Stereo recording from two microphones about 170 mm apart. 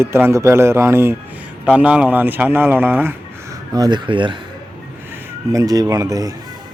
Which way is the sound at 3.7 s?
25° right (ahead or behind).